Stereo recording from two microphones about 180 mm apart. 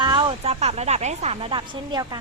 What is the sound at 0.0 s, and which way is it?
A woman's voice, 25° right (ahead or behind).